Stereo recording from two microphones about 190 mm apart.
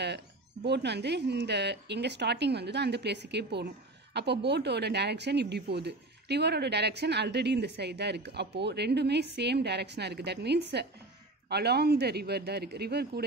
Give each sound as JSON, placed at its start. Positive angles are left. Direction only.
{"t": 0.7, "sound": "speech", "side_deg": -60}